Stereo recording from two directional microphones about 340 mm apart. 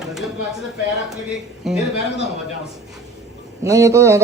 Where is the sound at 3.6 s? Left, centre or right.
Centre.